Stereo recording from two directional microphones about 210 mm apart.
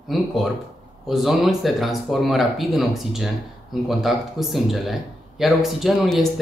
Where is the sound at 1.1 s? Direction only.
Centre (ahead or behind).